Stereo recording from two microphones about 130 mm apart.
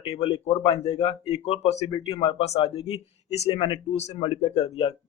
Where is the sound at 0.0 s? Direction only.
50° left (ahead or behind).